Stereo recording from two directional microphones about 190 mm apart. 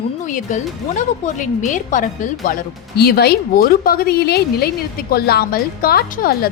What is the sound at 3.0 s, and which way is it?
A woman's voice, 55° left (ahead or behind).